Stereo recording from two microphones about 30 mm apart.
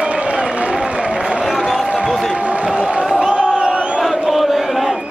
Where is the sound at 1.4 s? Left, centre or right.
Centre.